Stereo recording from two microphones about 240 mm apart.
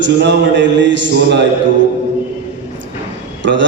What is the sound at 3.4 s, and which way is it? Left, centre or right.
Speech, right.